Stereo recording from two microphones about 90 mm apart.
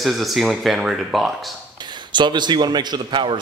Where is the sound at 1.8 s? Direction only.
55° right (ahead or behind).